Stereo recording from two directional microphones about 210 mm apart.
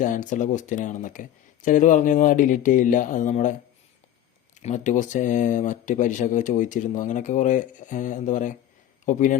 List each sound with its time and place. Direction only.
0.0 s speech: 35° left (ahead or behind)
4.6 s speech: 35° left (ahead or behind)